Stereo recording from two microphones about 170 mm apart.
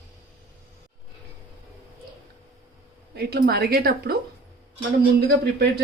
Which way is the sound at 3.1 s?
70° right (ahead or behind).